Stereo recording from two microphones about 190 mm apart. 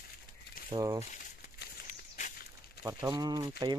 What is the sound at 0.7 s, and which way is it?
Speech, 20° right (ahead or behind).